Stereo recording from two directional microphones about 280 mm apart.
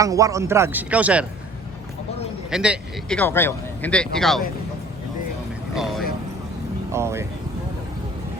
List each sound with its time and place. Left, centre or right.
0.0 s speech: centre
2.5 s a man's voice: centre
5.7 s vehicle: centre
6.9 s speech: centre